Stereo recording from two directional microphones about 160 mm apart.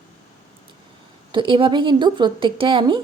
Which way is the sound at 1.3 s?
30° right (ahead or behind).